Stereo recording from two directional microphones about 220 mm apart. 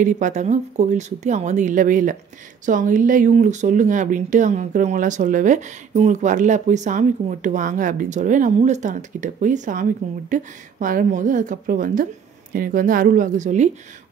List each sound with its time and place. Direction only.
0.0 s speech: 35° right (ahead or behind)